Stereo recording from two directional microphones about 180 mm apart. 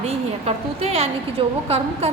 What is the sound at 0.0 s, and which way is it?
A woman's voice, 35° right (ahead or behind).